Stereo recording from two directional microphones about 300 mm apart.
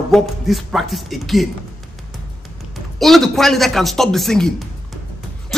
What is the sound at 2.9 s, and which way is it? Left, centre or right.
A man's voice, centre.